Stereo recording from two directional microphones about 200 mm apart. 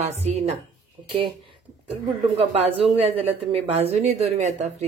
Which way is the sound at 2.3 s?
30° right (ahead or behind).